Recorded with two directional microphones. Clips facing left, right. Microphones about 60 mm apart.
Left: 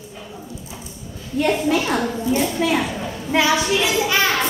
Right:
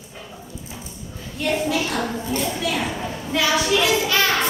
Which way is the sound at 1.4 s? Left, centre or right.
Left.